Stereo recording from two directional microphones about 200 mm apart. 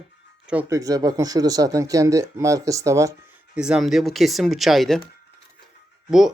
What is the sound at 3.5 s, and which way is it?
Speech, 5° right (ahead or behind).